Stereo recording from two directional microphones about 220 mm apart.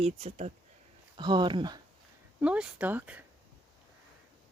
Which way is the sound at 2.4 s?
5° right (ahead or behind).